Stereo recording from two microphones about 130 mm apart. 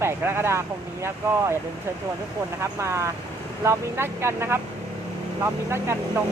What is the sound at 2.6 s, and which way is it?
Speech, 20° right (ahead or behind).